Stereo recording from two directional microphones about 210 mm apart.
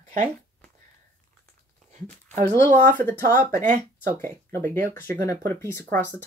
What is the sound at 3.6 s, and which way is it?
Speech, 35° right (ahead or behind).